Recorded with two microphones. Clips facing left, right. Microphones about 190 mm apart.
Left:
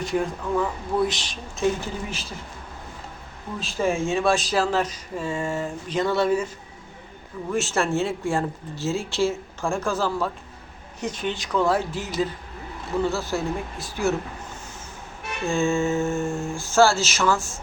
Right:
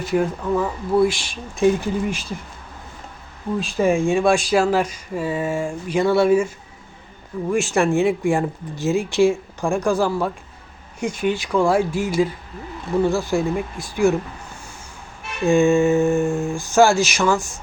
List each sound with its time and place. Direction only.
0.0 s speech: 5° right (ahead or behind)
3.6 s speech: 15° right (ahead or behind)
7.5 s speech: 15° right (ahead or behind)